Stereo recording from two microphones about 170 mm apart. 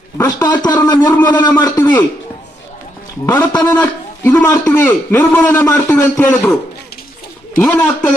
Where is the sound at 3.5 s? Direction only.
10° left (ahead or behind).